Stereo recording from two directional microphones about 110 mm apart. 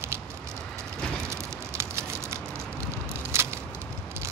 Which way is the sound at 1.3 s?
25° right (ahead or behind).